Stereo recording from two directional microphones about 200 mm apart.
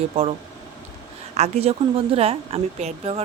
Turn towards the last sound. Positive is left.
turn(degrees=-30)  # may be behind; listen again after turning